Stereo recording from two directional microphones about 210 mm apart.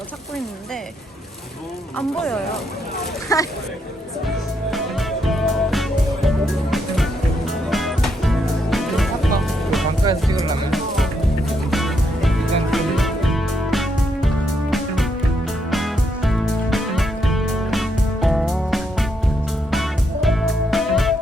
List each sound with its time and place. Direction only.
2.0 s speech: 5° left (ahead or behind)
4.7 s music: centre (ahead or behind)
10.0 s music: 20° right (ahead or behind)
10.7 s music: centre (ahead or behind)